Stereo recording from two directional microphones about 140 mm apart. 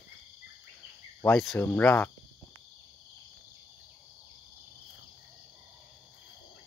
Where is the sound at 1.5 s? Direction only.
15° left (ahead or behind).